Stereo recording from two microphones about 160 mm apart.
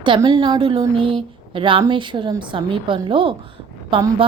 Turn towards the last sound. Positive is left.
turn(degrees=-30)  # may be behind; listen again after turning